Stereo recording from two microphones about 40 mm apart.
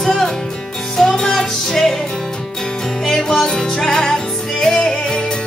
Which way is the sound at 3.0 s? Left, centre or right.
Centre.